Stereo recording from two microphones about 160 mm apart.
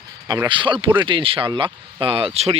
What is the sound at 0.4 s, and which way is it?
Speech, 30° right (ahead or behind).